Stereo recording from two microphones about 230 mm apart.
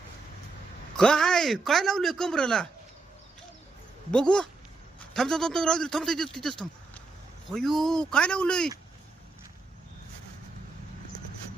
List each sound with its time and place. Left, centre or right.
0.9 s speech: centre
4.1 s speech: centre
7.5 s speech: centre